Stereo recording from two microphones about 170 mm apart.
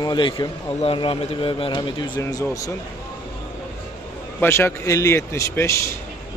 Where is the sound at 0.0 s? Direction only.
25° left (ahead or behind).